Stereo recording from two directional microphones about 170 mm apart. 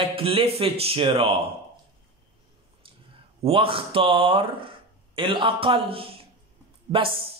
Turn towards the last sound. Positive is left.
turn(degrees=-30)  # may be behind; listen again after turning